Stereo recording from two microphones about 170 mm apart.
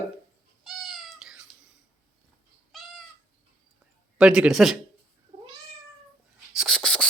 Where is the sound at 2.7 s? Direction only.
Centre (ahead or behind).